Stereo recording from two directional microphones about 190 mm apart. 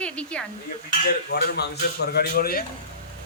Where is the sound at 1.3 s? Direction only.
60° left (ahead or behind).